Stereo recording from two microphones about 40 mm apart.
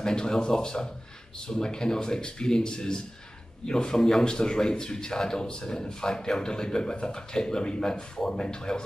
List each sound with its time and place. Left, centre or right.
0.0 s a man's voice: centre